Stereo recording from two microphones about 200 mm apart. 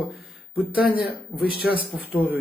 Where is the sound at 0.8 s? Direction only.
50° left (ahead or behind).